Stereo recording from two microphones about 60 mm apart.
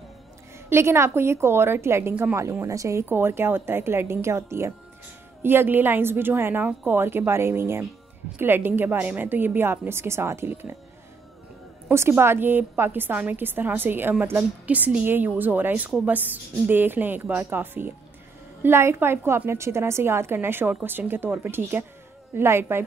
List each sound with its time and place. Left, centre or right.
0.7 s a woman's voice: right
2.7 s speech: right
3.1 s a woman's voice: right
5.4 s a woman's voice: right
11.9 s a woman's voice: right
14.7 s a woman's voice: right